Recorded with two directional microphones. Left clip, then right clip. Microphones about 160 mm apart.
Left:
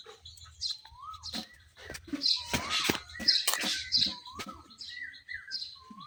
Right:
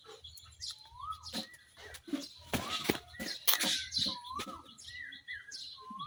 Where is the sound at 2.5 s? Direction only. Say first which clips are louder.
Left 5 dB; 45° left (ahead or behind).